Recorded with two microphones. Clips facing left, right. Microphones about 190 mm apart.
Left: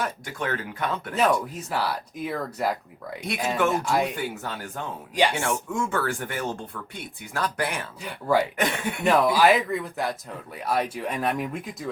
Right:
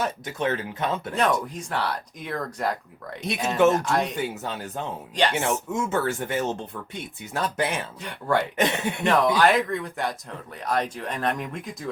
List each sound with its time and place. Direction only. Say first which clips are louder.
0.0 s speech: right 3 dB; 25° right (ahead or behind)
1.1 s speech: left 3 dB; 5° left (ahead or behind)
4.2 s speech: right 2 dB; 20° right (ahead or behind)
8.0 s speech: left 2 dB; 5° left (ahead or behind)
8.5 s speech: right 2 dB; 25° right (ahead or behind)
9.0 s speech: left 1 dB; 5° left (ahead or behind)